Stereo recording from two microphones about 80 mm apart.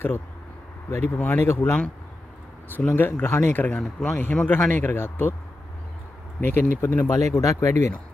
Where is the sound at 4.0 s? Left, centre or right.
Centre.